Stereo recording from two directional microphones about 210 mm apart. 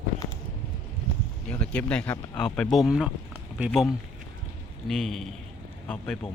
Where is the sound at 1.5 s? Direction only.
5° left (ahead or behind).